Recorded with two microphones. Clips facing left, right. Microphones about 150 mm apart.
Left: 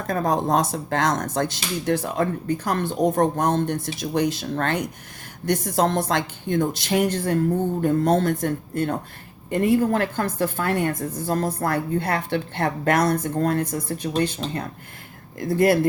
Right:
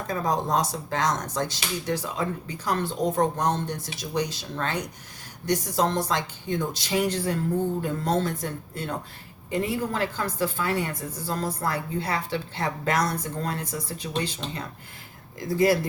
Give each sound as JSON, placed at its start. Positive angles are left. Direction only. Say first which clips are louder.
{"t": 0.1, "sound": "a woman's voice", "louder": "left 4 dB", "side_deg": 55}